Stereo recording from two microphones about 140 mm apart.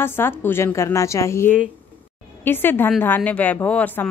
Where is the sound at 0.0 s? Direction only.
15° left (ahead or behind).